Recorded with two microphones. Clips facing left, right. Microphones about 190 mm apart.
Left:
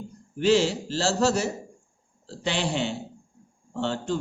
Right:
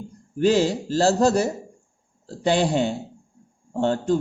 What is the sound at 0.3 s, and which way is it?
Speech, 45° right (ahead or behind).